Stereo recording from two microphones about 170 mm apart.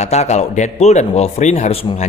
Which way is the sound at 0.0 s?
40° left (ahead or behind).